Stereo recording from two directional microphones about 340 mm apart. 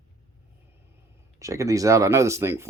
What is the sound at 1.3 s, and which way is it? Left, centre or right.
Speech, centre.